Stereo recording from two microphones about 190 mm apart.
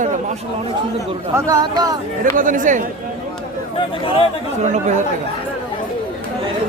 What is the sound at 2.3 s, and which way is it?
Speech, 45° right (ahead or behind).